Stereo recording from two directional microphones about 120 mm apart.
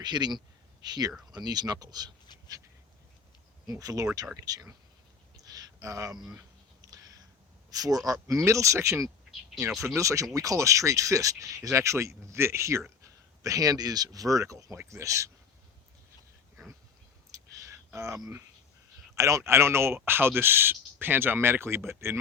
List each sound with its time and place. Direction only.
0.0 s speech: 35° right (ahead or behind)
3.7 s speech: 30° right (ahead or behind)
5.4 s a sound: 30° right (ahead or behind)
7.7 s speech: 30° right (ahead or behind)
17.3 s a sound: 25° right (ahead or behind)
19.1 s speech: 25° right (ahead or behind)